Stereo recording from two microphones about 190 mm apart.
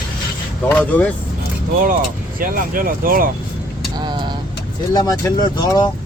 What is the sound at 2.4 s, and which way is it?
Speech, 50° right (ahead or behind).